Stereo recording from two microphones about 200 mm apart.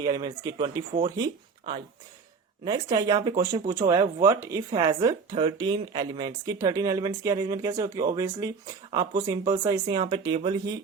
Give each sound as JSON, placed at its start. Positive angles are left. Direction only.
{"t": 0.0, "sound": "speech", "side_deg": -20}